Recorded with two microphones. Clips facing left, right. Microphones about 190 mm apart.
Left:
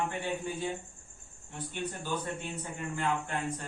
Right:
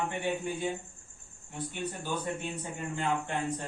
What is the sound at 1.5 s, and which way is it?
Speech, 10° right (ahead or behind).